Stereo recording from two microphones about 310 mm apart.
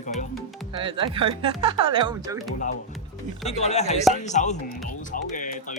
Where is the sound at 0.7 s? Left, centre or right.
Centre.